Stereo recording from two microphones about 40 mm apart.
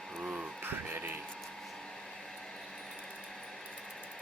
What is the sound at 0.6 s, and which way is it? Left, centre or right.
Music, right.